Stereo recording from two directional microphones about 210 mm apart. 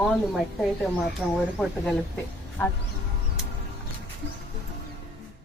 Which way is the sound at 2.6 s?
10° left (ahead or behind).